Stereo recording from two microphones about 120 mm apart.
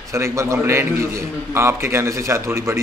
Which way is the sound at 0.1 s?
25° right (ahead or behind).